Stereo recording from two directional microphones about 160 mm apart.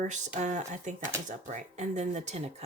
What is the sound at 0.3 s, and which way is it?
Speech, 50° right (ahead or behind).